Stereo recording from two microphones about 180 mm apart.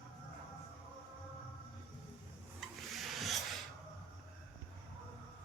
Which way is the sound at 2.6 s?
Centre (ahead or behind).